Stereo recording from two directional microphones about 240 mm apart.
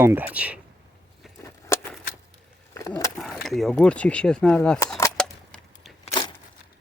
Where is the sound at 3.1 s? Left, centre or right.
Centre.